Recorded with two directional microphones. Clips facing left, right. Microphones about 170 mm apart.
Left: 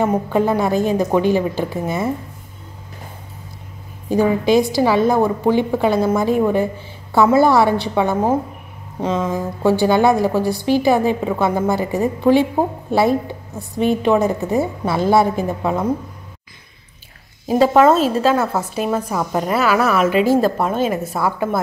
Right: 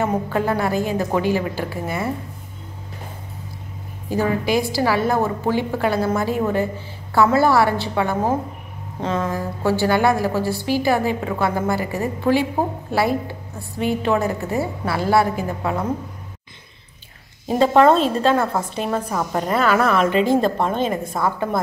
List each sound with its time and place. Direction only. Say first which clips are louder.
0.0 s a woman's voice: left 4 dB; 15° left (ahead or behind)
4.1 s a woman's voice: left 5 dB; 20° left (ahead or behind)
17.5 s a woman's voice: left 2 dB; 5° left (ahead or behind)